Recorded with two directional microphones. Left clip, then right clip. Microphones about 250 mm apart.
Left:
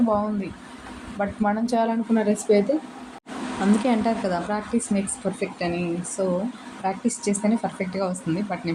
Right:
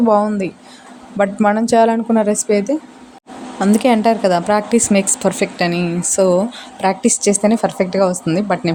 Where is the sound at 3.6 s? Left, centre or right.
Right.